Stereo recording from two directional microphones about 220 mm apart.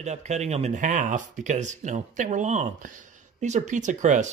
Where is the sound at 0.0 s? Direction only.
30° right (ahead or behind).